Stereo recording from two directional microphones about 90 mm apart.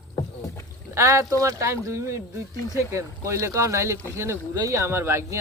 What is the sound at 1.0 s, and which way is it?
Speech, 35° right (ahead or behind).